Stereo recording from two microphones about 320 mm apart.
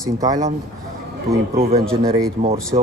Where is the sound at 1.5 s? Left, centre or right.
Right.